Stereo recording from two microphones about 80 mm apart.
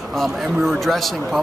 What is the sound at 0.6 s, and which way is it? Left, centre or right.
Speech, centre.